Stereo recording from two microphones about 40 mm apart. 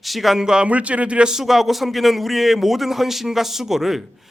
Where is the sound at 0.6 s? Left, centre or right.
Right.